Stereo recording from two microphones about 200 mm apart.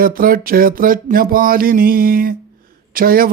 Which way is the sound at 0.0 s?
45° right (ahead or behind).